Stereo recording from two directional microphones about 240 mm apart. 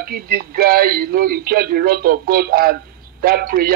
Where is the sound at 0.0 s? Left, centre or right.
Right.